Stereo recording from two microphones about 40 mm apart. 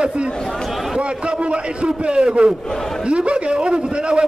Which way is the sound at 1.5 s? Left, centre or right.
Right.